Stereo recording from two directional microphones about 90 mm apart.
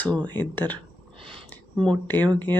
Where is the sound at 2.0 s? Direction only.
20° left (ahead or behind).